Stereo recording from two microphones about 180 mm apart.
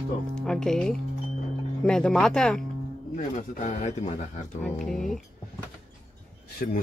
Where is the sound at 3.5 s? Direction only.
40° left (ahead or behind).